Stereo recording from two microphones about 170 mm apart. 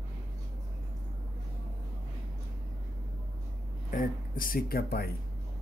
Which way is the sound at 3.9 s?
55° left (ahead or behind).